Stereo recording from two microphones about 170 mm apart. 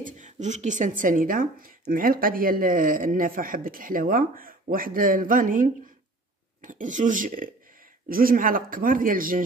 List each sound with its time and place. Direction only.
0.0 s a woman's voice: 45° right (ahead or behind)